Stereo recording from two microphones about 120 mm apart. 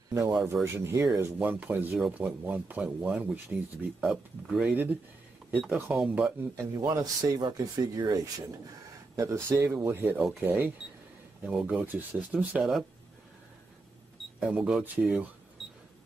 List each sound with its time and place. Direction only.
0.1 s speech: 25° right (ahead or behind); by 6.3 s 5° right (ahead or behind)
6.5 s speech: 25° right (ahead or behind); by 12.6 s 10° right (ahead or behind)
14.4 s speech: 10° right (ahead or behind)